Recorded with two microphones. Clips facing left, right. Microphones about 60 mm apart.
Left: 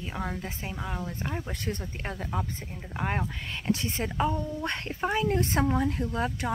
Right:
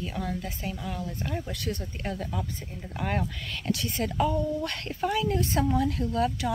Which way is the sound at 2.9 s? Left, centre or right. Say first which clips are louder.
Right 1 dB; left.